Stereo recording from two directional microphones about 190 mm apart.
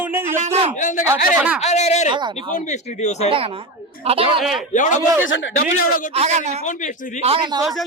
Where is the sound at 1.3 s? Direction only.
5° right (ahead or behind).